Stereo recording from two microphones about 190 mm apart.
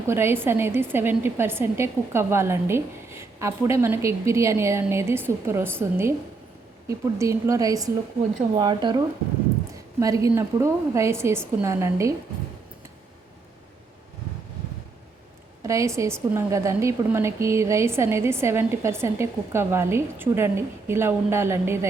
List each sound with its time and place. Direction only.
0.1 s a woman's voice: 15° right (ahead or behind)
15.6 s a woman's voice: 15° right (ahead or behind)